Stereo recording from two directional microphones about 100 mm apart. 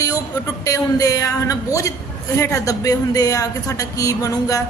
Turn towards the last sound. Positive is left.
turn(degrees=35)  # may be behind; listen again after turning